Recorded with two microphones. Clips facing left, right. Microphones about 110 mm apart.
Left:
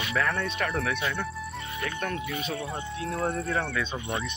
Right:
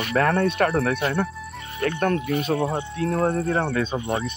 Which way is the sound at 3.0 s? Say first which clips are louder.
Right 7 dB; 40° right (ahead or behind).